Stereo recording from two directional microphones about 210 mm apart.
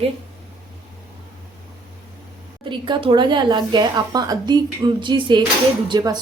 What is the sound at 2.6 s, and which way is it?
A woman's voice, 20° right (ahead or behind).